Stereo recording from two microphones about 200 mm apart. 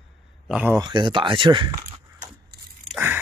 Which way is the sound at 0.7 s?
20° right (ahead or behind).